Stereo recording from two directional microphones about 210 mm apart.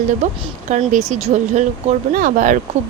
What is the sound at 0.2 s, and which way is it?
Speech, 35° right (ahead or behind).